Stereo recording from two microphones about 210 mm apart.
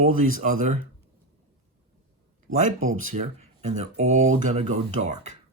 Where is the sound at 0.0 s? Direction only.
40° right (ahead or behind).